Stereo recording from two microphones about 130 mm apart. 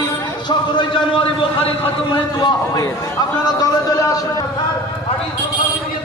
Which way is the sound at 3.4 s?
30° left (ahead or behind).